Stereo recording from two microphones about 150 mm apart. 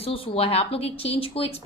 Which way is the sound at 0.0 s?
40° left (ahead or behind).